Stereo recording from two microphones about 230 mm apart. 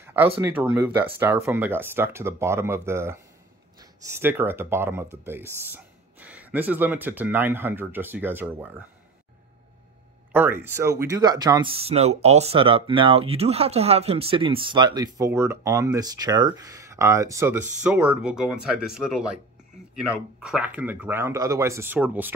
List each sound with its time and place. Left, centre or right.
0.0 s a sound: centre
0.4 s speech: centre
10.3 s speech: centre